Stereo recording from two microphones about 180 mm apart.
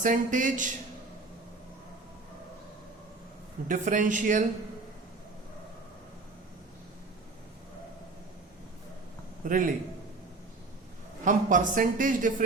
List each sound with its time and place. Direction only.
0.0 s speech: 45° right (ahead or behind)
3.7 s speech: 45° right (ahead or behind)
9.4 s speech: 50° right (ahead or behind)
11.3 s speech: 45° right (ahead or behind)